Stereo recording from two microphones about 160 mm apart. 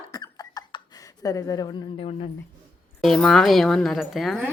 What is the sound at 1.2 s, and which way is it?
Speech, 20° left (ahead or behind).